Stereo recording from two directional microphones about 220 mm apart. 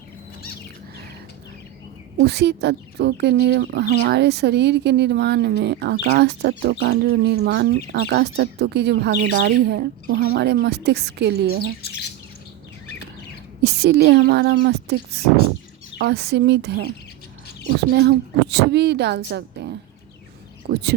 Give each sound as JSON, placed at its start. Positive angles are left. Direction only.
{"t": 2.2, "sound": "speech", "side_deg": -50}
{"t": 13.6, "sound": "speech", "side_deg": -50}
{"t": 18.5, "sound": "speech", "side_deg": -50}
{"t": 19.6, "sound": "a sound", "side_deg": -50}
{"t": 20.7, "sound": "speech", "side_deg": -50}